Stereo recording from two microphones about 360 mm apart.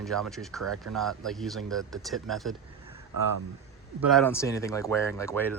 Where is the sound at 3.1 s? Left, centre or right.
Right.